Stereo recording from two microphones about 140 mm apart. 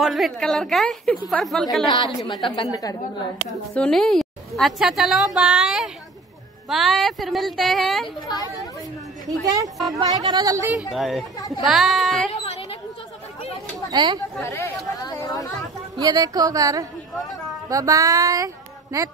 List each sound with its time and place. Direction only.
0.0 s a woman's voice: centre (ahead or behind)
1.9 s a woman's voice: 35° left (ahead or behind)
2.7 s speech: 25° left (ahead or behind)
3.7 s a woman's voice: 5° left (ahead or behind)
10.0 s speech: 30° right (ahead or behind)
10.9 s a woman's voice: centre (ahead or behind)
11.3 s speech: 25° left (ahead or behind)
11.6 s a woman's voice: centre (ahead or behind)
13.8 s speech: 30° right (ahead or behind)
14.4 s speech: 20° left (ahead or behind)
16.0 s speech: 30° right (ahead or behind)